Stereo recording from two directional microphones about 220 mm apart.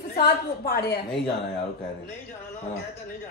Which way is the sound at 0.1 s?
45° left (ahead or behind).